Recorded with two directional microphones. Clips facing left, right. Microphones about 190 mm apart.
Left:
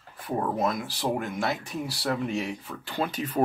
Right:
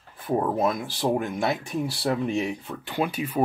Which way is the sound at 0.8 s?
25° right (ahead or behind).